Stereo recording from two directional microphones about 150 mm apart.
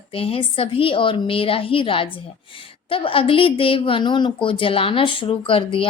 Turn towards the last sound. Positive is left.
turn(degrees=35)  # may be behind; listen again after turning